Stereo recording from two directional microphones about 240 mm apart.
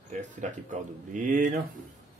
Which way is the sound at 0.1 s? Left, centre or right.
Right.